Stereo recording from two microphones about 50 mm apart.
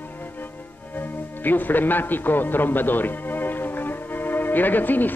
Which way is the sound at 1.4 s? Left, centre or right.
Left.